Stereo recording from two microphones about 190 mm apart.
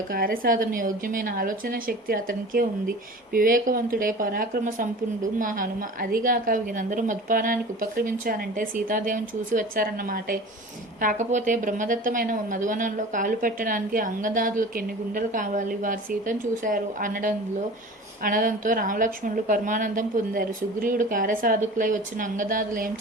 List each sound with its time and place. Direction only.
0.1 s a woman's voice: 50° right (ahead or behind)